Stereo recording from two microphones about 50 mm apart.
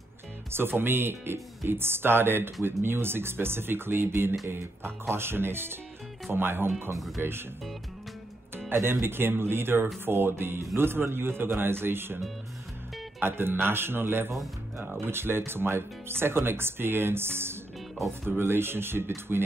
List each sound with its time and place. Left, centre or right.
0.5 s speech: right
8.6 s music: right
9.0 s speech: right
13.2 s speech: right
18.0 s speech: centre
18.4 s speech: right